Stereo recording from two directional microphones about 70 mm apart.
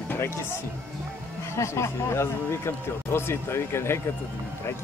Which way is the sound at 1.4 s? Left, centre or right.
Left.